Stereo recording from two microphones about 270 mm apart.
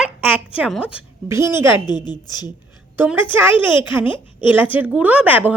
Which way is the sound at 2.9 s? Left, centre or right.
Centre.